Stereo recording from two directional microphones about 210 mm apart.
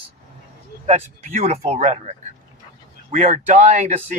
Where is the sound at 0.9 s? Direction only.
30° right (ahead or behind).